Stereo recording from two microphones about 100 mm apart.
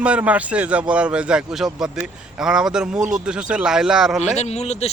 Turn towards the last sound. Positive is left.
turn(degrees=90)